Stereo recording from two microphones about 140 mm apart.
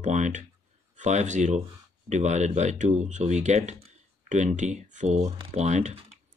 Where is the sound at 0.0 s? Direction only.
60° right (ahead or behind).